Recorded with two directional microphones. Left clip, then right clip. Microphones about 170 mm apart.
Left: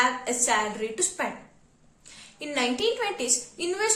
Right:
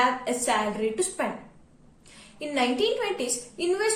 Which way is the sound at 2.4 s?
15° left (ahead or behind).